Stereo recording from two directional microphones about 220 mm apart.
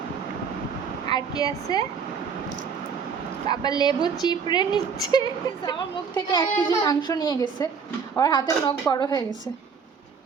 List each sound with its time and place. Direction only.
1.0 s speech: 15° left (ahead or behind)
3.5 s a woman's voice: 20° left (ahead or behind)